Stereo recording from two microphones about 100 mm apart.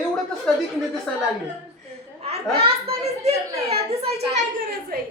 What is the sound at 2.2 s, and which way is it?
A child's voice, 85° right.